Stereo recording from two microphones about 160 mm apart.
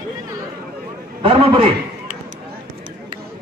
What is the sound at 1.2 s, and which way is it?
Speech, 35° right (ahead or behind).